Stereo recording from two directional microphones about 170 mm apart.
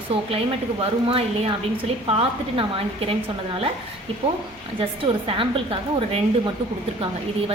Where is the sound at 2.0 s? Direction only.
35° right (ahead or behind).